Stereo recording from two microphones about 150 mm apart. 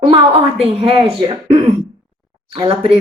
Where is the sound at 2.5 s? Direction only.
35° right (ahead or behind).